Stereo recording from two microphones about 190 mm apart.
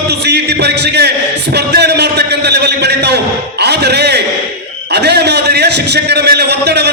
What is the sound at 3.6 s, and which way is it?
Music, 60° right (ahead or behind).